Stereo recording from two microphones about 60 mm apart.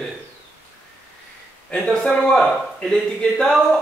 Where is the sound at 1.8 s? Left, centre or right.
Centre.